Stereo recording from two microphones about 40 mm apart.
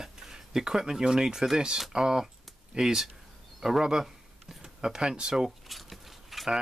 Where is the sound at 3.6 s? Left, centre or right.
Centre.